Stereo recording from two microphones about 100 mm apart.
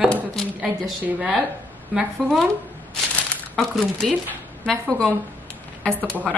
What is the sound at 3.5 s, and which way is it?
Speech, centre (ahead or behind).